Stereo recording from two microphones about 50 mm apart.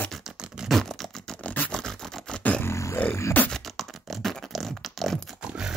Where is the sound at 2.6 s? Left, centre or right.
Left.